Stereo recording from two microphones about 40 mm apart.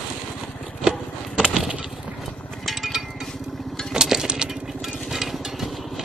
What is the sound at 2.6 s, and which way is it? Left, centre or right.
Music, centre.